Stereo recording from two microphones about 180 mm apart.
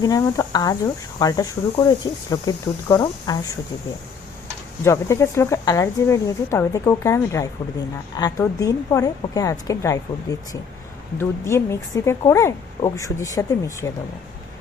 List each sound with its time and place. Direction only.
0.0 s a woman's voice: 20° left (ahead or behind)
4.8 s a woman's voice: 15° left (ahead or behind)